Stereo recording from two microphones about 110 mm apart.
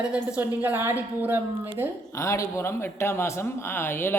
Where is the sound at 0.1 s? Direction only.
15° right (ahead or behind).